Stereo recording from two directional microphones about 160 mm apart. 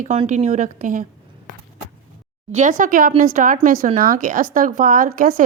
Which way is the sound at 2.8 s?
55° right (ahead or behind).